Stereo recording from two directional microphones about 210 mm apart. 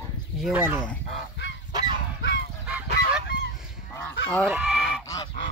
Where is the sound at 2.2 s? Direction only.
55° left (ahead or behind).